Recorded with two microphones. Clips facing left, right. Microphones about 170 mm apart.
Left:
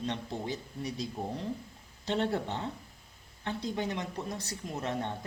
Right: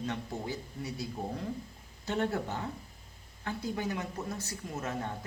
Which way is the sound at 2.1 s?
20° left (ahead or behind).